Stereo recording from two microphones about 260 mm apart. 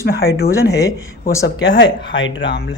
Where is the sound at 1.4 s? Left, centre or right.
Left.